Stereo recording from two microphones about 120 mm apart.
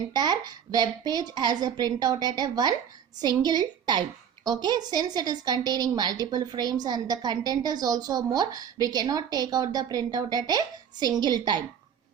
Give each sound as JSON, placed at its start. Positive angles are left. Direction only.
{"t": 0.1, "sound": "a woman's voice", "side_deg": -35}